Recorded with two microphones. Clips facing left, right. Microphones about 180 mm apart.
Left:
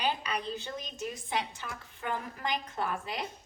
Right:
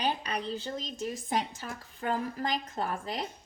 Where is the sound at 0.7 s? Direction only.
40° right (ahead or behind).